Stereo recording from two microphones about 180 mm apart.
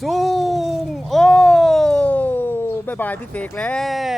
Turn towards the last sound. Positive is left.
turn(degrees=0)  # may be behind; listen again after turning